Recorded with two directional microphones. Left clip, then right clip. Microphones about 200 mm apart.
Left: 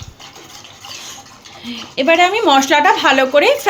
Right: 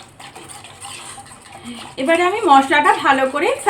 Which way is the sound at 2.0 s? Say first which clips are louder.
Left 4 dB; 45° left (ahead or behind).